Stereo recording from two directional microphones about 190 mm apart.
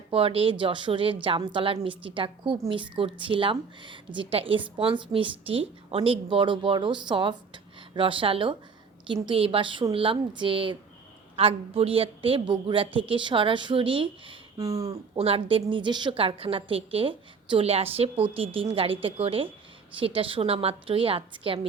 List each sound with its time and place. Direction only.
0.1 s a woman's voice: 30° right (ahead or behind)
15.2 s a woman's voice: 30° right (ahead or behind)